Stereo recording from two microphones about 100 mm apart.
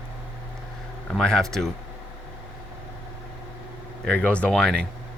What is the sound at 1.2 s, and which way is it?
Speech, 5° left (ahead or behind).